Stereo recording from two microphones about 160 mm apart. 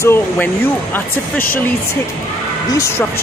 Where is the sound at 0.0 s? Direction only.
15° left (ahead or behind).